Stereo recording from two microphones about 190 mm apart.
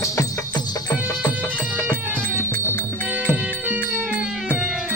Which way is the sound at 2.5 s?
10° left (ahead or behind).